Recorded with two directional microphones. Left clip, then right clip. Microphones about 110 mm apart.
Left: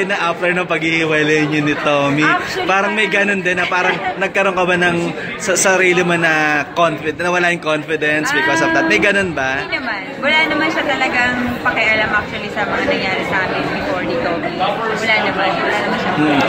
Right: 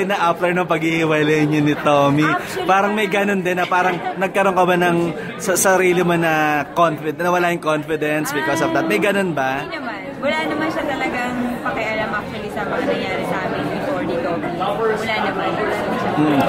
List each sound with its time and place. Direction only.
0.1 s a man's voice: 30° right (ahead or behind)